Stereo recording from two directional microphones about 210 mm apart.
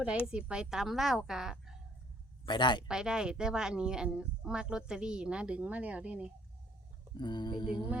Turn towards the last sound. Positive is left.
turn(degrees=20)  # may be behind; listen again after turning